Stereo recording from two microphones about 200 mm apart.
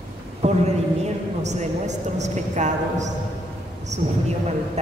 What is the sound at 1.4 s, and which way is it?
A woman's voice, 35° right (ahead or behind).